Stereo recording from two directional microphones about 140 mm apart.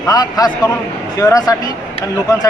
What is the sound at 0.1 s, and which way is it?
Speech, 30° left (ahead or behind).